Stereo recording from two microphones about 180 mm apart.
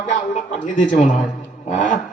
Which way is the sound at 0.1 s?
40° left (ahead or behind).